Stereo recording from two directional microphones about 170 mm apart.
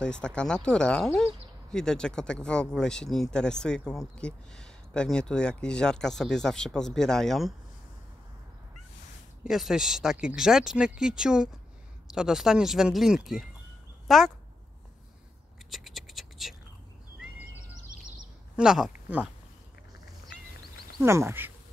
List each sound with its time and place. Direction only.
0.0 s speech: 5° left (ahead or behind)
9.4 s speech: centre (ahead or behind)
15.7 s scratch: centre (ahead or behind)
18.6 s speech: 5° right (ahead or behind)
21.0 s speech: 15° right (ahead or behind)